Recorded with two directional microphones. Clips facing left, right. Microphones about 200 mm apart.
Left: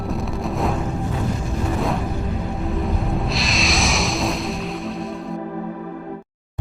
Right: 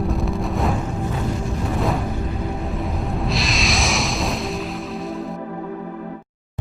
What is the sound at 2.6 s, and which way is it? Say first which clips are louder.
Music: left 2 dB; centre (ahead or behind).